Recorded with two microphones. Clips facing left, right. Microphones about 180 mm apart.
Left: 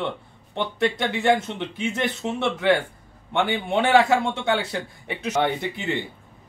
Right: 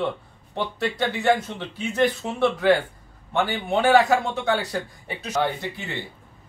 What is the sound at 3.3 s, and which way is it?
A man's voice, 25° left (ahead or behind).